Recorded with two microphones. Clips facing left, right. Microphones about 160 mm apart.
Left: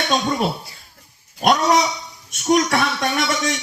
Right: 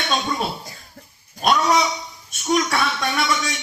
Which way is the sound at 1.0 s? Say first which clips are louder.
Right 8 dB; 35° right (ahead or behind).